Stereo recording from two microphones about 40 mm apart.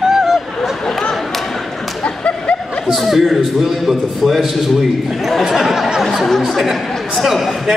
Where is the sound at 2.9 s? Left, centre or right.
Centre.